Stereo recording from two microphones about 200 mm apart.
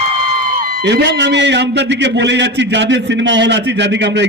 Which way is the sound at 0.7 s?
50° right (ahead or behind).